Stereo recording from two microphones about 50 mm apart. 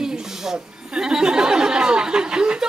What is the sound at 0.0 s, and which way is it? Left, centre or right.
Speech, centre.